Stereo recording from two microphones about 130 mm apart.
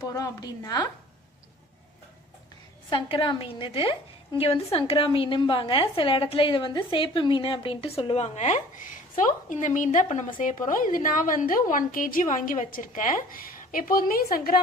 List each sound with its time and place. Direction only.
0.0 s a woman's voice: 25° left (ahead or behind)
2.9 s a woman's voice: 40° left (ahead or behind); by 14.1 s 90° left